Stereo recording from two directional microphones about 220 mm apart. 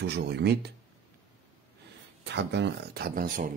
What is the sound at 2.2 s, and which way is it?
Speech, 55° right (ahead or behind).